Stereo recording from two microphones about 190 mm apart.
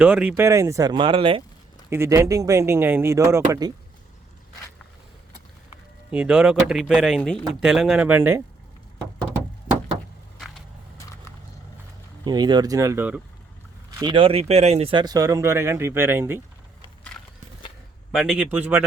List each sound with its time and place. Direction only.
0.0 s speech: 5° right (ahead or behind); by 1.5 s 25° right (ahead or behind)
1.9 s speech: 15° right (ahead or behind)
6.1 s speech: 5° right (ahead or behind)
12.2 s speech: 20° right (ahead or behind)
14.0 s speech: 25° right (ahead or behind)
17.1 s horse: 5° left (ahead or behind)
18.1 s speech: 5° right (ahead or behind)